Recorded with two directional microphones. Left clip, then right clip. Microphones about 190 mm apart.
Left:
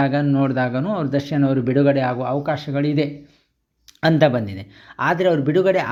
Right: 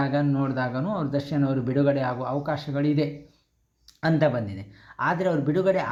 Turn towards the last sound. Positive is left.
turn(degrees=30)  # may be behind; listen again after turning